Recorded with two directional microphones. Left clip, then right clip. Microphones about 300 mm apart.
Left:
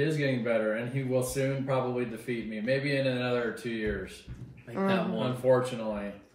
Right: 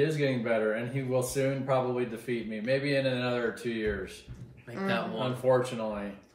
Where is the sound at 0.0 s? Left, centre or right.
Centre.